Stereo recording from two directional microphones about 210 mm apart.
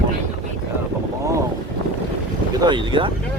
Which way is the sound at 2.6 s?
25° right (ahead or behind).